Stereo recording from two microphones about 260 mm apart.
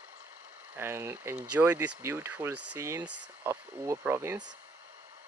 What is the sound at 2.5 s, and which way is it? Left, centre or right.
Speech, right.